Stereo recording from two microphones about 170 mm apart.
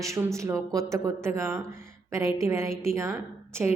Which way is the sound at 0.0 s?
15° right (ahead or behind).